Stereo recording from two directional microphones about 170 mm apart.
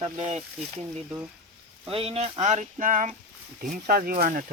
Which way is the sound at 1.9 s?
35° right (ahead or behind).